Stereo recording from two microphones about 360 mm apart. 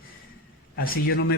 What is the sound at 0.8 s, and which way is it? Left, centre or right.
Speech, left.